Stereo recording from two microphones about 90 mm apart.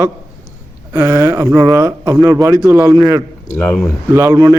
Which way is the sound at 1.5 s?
45° right (ahead or behind).